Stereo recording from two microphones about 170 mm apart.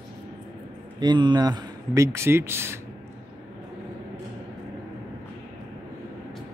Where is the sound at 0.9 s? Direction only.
25° right (ahead or behind).